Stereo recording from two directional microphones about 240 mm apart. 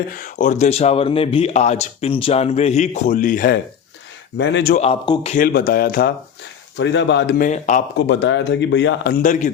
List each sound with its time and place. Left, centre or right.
0.1 s speech: left
4.4 s speech: left
4.7 s speech: left
5.3 s speech: left
7.9 s speech: left
9.2 s speech: left